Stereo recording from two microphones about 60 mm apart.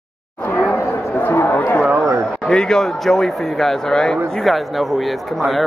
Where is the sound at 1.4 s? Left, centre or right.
Left.